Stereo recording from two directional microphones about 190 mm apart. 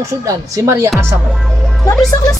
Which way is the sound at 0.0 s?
15° right (ahead or behind).